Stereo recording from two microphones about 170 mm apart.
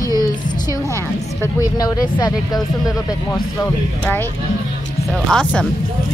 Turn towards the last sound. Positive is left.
turn(degrees=0)  # may be behind; listen again after turning